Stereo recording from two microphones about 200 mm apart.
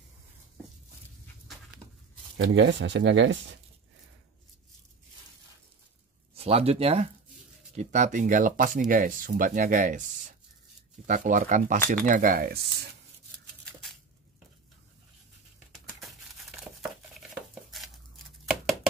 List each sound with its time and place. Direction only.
2.4 s speech: 60° right (ahead or behind)
6.3 s speech: 30° right (ahead or behind)
11.1 s speech: 40° right (ahead or behind)
15.7 s crumpling: centre (ahead or behind)